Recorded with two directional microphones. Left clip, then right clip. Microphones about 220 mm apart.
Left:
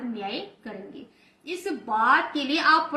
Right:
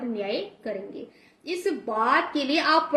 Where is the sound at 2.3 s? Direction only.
Centre (ahead or behind).